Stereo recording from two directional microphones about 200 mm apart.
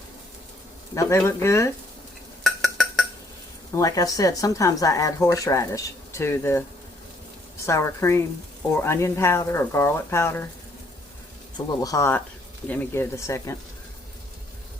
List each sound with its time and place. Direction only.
0.9 s speech: 15° left (ahead or behind)
2.4 s dishes: centre (ahead or behind)
3.8 s speech: 15° left (ahead or behind)
11.5 s speech: 15° left (ahead or behind)